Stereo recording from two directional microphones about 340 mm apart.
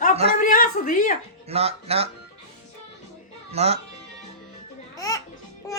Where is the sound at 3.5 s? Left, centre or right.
Centre.